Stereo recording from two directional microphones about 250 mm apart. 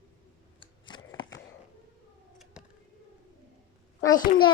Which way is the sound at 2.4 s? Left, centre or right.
Centre.